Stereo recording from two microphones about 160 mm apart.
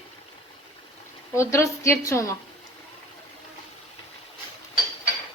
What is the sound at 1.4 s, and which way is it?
Speech, 20° left (ahead or behind).